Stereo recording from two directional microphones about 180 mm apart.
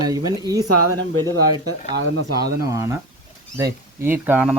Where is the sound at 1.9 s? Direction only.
85° right.